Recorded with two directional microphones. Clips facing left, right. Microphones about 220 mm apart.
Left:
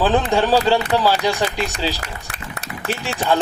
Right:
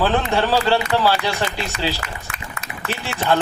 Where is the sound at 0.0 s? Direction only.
15° left (ahead or behind).